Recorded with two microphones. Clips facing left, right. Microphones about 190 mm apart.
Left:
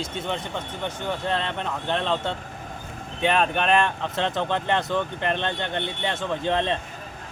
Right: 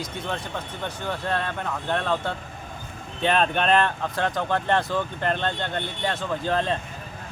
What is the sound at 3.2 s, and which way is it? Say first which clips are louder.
Speech: even; 10° left (ahead or behind).